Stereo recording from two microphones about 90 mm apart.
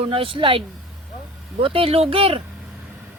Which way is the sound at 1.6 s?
90° right.